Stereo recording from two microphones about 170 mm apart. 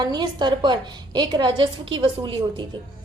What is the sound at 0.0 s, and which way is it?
A woman's voice, 25° right (ahead or behind).